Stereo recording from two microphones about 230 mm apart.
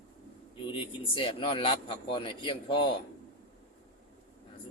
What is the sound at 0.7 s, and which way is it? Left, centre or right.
A man's voice, left.